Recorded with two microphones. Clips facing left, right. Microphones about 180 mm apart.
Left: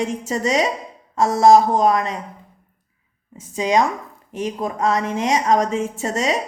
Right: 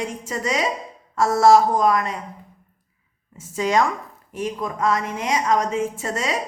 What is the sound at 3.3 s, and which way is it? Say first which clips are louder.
A woman's voice: left 2 dB; 15° left (ahead or behind).